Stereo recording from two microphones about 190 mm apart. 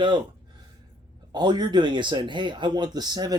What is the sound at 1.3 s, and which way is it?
Speech, 20° right (ahead or behind).